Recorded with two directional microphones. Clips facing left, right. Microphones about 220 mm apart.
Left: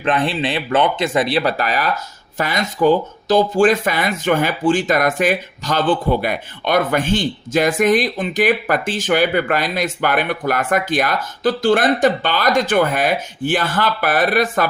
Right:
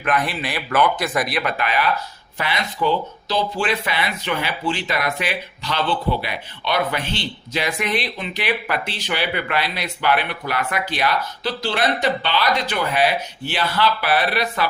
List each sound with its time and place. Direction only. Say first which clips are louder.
0.0 s speech: left 4 dB; 30° left (ahead or behind); by 14.7 s 50° left (ahead or behind)